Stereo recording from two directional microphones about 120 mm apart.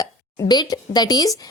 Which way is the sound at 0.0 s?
35° left (ahead or behind).